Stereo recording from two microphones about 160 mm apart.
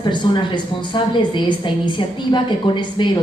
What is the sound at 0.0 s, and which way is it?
A woman's voice, 30° left (ahead or behind).